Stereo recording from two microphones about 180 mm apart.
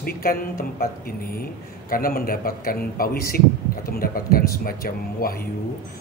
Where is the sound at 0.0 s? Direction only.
55° left (ahead or behind).